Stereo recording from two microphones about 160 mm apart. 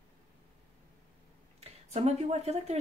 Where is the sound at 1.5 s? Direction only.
40° right (ahead or behind).